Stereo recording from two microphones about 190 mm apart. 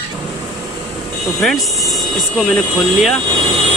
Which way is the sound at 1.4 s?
Centre (ahead or behind).